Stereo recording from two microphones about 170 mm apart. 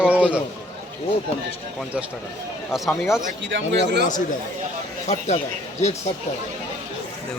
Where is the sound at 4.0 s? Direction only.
50° left (ahead or behind).